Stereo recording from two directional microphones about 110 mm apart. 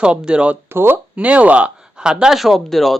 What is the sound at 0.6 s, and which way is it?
Speech, 20° right (ahead or behind).